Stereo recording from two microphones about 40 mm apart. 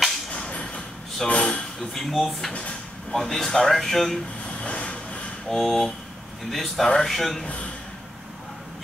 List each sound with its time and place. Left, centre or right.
0.5 s a sound: left
1.8 s speech: centre
4.6 s vehicle: left
5.6 s speech: centre
7.4 s a man's voice: left